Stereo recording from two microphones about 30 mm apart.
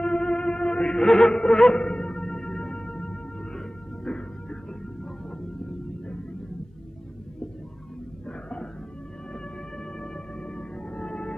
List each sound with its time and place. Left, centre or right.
0.0 s music: left
1.0 s music: centre
8.3 s a sound: left
10.5 s music: left